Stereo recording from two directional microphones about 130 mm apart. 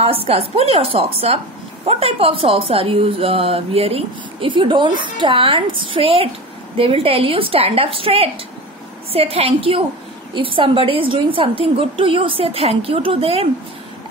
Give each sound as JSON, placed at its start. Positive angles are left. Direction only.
{"t": 0.0, "sound": "a woman's voice", "side_deg": -50}